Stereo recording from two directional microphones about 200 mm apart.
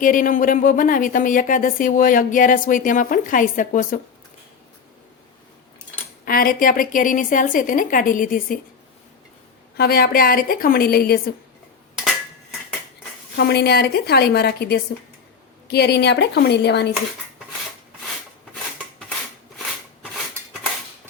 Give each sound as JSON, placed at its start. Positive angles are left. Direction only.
{"t": 0.0, "sound": "speech", "side_deg": 40}
{"t": 6.2, "sound": "a woman's voice", "side_deg": 45}
{"t": 9.7, "sound": "a woman's voice", "side_deg": 50}
{"t": 13.3, "sound": "a woman's voice", "side_deg": 55}